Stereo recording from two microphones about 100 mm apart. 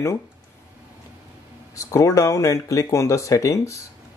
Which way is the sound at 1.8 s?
30° left (ahead or behind).